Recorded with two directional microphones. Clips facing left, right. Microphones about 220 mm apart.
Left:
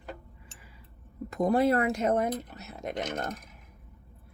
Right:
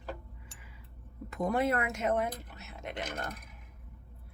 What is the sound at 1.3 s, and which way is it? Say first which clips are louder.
Speech: left 6 dB; 35° left (ahead or behind).